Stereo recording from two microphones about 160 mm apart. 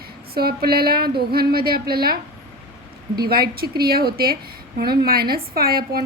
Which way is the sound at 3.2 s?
70° right (ahead or behind).